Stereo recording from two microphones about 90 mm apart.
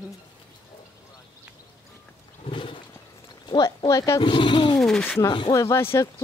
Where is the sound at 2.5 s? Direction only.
70° left (ahead or behind).